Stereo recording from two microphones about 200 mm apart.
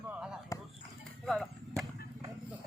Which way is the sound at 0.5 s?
15° left (ahead or behind).